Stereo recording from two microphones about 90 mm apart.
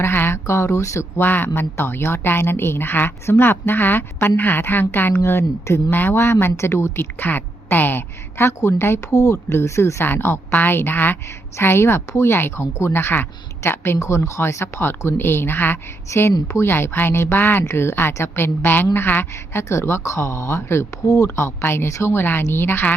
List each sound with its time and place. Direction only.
0.0 s speech: 25° left (ahead or behind)